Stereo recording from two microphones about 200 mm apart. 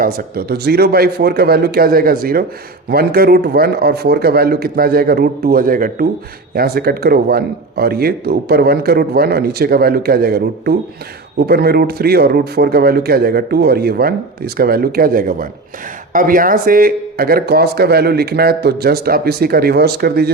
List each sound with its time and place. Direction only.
0.0 s speech: 50° right (ahead or behind)